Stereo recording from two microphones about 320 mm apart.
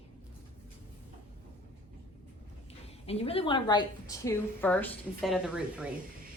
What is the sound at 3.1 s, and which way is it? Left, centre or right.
A woman's voice, centre.